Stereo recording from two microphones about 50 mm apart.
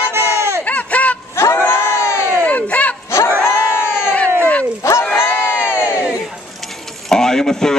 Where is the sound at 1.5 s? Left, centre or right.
Left.